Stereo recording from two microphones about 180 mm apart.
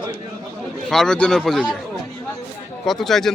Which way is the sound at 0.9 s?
5° left (ahead or behind).